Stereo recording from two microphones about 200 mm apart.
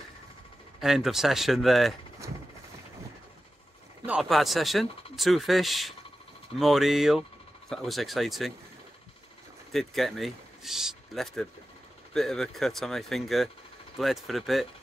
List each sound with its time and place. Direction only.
0.7 s speech: centre (ahead or behind)
2.2 s vehicle: 15° right (ahead or behind)
4.0 s speech: 5° right (ahead or behind)
9.7 s speech: centre (ahead or behind)